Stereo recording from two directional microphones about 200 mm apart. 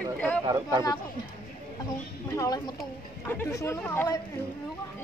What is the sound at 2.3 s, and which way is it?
A woman's voice, 20° left (ahead or behind).